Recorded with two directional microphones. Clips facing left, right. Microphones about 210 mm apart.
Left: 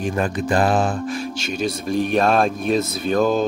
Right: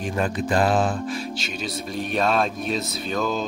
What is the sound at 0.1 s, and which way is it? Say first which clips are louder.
Speech: even; 50° left (ahead or behind).